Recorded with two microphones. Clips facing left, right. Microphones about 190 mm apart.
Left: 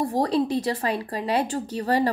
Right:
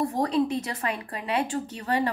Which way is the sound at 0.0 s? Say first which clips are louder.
Left 2 dB; 35° left (ahead or behind).